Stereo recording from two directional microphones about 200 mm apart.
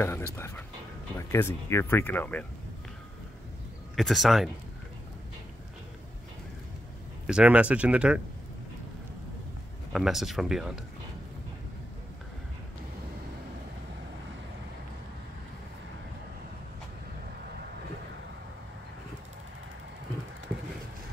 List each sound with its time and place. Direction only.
0.0 s speech: 10° left (ahead or behind)
3.9 s speech: centre (ahead or behind)
7.2 s speech: 5° right (ahead or behind)
9.9 s speech: centre (ahead or behind)